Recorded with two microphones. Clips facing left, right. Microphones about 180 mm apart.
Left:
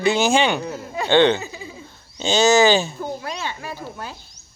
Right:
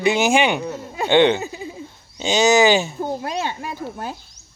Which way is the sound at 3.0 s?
50° right (ahead or behind).